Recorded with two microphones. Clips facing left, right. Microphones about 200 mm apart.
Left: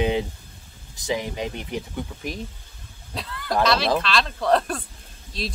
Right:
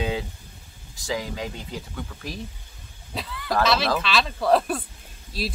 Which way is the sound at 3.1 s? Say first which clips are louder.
Left 1 dB; centre (ahead or behind).